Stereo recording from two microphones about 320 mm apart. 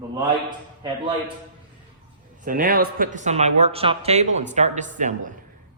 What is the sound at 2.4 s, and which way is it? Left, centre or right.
Speech, right.